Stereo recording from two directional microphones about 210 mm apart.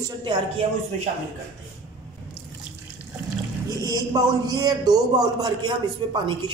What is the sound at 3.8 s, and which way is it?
Speech, 15° right (ahead or behind).